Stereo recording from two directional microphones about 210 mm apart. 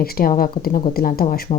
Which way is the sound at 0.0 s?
45° left (ahead or behind).